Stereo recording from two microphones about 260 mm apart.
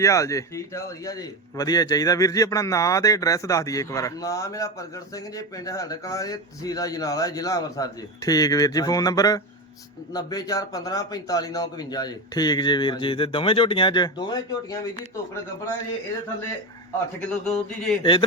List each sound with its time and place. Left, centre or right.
0.0 s a man's voice: centre
17.2 s speech: centre
18.0 s speech: centre